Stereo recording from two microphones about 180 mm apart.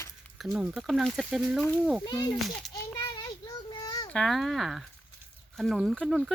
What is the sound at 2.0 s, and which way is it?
Speech, 25° left (ahead or behind).